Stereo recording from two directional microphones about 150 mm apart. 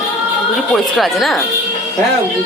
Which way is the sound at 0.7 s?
Centre (ahead or behind).